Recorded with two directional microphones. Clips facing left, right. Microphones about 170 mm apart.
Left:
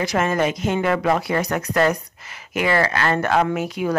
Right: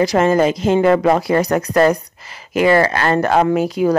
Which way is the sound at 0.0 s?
35° right (ahead or behind).